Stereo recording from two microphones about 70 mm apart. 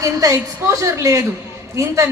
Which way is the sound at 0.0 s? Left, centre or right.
Right.